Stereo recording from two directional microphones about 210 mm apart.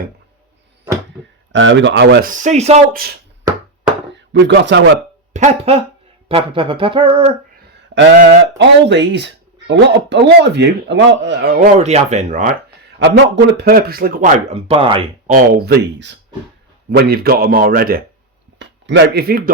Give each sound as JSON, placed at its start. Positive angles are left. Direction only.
{"t": 1.5, "sound": "speech", "side_deg": -60}
{"t": 2.2, "sound": "speech", "side_deg": -35}
{"t": 4.1, "sound": "speech", "side_deg": -55}
{"t": 5.3, "sound": "speech", "side_deg": -30}
{"t": 7.9, "sound": "speech", "side_deg": -55}
{"t": 11.5, "sound": "speech", "side_deg": -35}
{"t": 13.0, "sound": "speech", "side_deg": -55}
{"t": 15.3, "sound": "speech", "side_deg": -50}
{"t": 18.6, "sound": "speech", "side_deg": -55}